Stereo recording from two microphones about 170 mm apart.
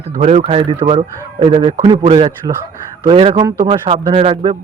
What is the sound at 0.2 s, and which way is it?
Speech, 40° right (ahead or behind).